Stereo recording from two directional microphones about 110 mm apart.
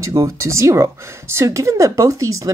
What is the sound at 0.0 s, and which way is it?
Speech, 25° right (ahead or behind).